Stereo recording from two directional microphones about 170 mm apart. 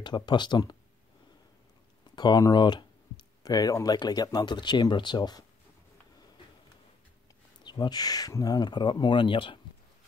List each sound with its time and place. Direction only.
0.0 s speech: 25° left (ahead or behind)
2.1 s speech: 25° left (ahead or behind)
7.6 s speech: 25° left (ahead or behind)